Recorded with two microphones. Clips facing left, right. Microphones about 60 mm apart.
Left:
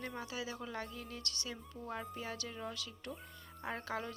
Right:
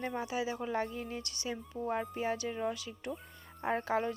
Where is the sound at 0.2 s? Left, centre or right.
Right.